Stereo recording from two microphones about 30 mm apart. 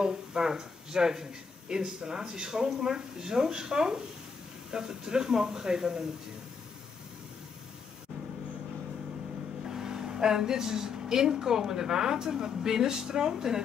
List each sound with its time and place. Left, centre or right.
0.0 s speech: right
9.7 s speech: right